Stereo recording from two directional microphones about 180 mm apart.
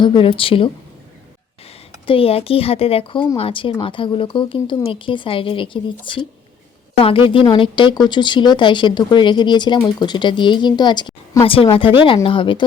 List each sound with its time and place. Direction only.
0.0 s speech: 30° left (ahead or behind)
2.0 s speech: 30° left (ahead or behind)
7.3 s speech: 30° left (ahead or behind)